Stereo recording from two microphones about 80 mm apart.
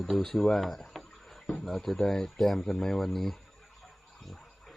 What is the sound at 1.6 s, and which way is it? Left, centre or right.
Speech, centre.